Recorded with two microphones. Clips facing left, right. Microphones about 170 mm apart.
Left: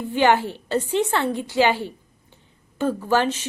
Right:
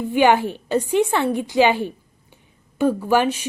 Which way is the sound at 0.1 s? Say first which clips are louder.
Right 2 dB; 15° right (ahead or behind).